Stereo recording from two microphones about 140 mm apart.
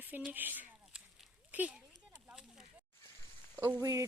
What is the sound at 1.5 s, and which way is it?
Speech, 10° right (ahead or behind).